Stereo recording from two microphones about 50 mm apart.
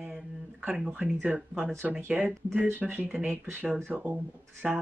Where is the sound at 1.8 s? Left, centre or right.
Right.